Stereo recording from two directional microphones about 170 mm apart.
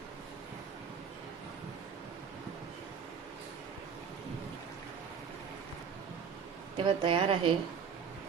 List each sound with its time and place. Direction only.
6.7 s a woman's voice: 30° right (ahead or behind)